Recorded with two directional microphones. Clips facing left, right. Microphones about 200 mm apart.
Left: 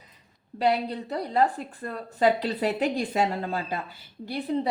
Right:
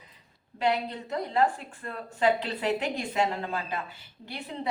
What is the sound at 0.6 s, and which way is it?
A woman's voice, 35° left (ahead or behind).